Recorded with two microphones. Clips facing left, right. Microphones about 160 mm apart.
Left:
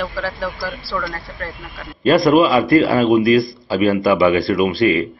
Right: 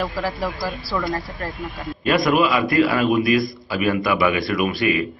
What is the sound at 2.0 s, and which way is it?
A man's voice, 30° left (ahead or behind).